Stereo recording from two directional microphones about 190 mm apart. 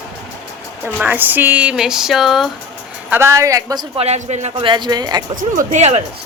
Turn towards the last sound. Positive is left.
turn(degrees=-35)  # may be behind; listen again after turning